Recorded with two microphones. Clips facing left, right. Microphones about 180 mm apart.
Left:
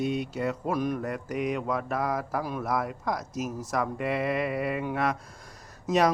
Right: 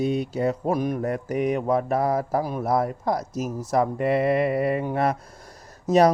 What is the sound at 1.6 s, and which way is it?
Speech, 30° right (ahead or behind).